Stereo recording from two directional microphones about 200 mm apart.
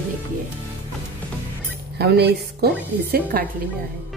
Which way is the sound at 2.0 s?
55° right (ahead or behind).